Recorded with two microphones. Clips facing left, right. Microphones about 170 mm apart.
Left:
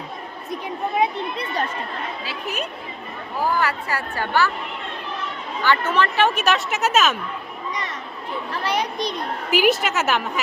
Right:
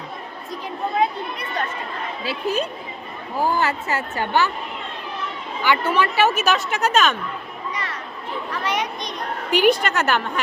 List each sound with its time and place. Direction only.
0.9 s speech: 20° left (ahead or behind)
2.2 s a woman's voice: 30° right (ahead or behind)
5.6 s a woman's voice: 10° right (ahead or behind); by 7.2 s 5° left (ahead or behind)
7.7 s children playing: 20° left (ahead or behind)
8.6 s a child's voice: 35° left (ahead or behind)
9.5 s a woman's voice: 5° left (ahead or behind)